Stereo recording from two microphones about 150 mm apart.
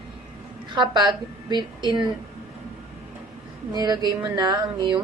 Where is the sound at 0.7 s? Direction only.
30° right (ahead or behind).